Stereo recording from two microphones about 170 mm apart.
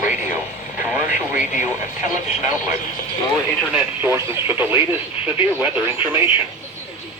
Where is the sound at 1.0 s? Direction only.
50° left (ahead or behind).